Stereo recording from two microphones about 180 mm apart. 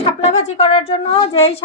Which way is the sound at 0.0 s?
35° left (ahead or behind).